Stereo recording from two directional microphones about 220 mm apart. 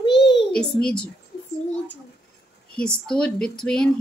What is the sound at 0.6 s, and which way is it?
Speech, 5° left (ahead or behind).